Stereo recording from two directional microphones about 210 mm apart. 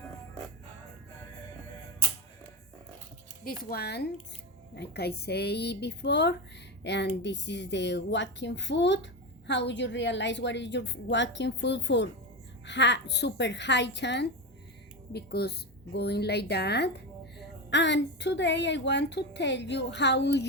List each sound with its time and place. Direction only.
3.4 s a woman's voice: 45° left (ahead or behind)